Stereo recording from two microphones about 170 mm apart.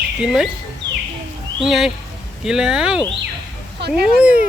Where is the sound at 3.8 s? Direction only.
85° right.